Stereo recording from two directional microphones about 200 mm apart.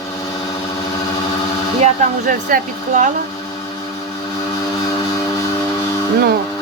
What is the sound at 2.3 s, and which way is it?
Speech, 45° right (ahead or behind).